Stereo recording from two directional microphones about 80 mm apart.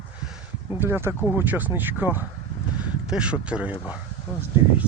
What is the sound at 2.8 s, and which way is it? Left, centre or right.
Speech, centre.